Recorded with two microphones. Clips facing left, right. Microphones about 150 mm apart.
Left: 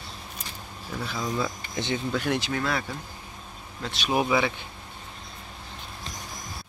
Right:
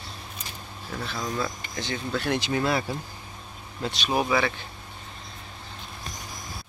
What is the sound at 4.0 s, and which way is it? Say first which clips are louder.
Speech: left 1 dB; 10° left (ahead or behind).